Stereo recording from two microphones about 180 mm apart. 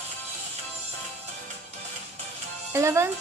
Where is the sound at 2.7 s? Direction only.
15° right (ahead or behind).